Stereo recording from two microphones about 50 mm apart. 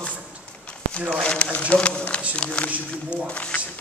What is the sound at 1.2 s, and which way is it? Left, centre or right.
Speech, left.